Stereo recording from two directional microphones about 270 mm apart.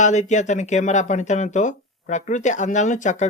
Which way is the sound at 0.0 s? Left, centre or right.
Left.